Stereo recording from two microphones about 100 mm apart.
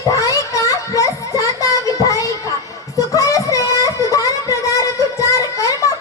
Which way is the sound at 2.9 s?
35° left (ahead or behind).